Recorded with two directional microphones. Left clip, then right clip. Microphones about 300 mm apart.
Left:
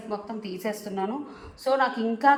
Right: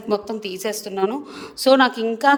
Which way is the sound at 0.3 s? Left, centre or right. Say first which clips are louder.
Right 7 dB; right.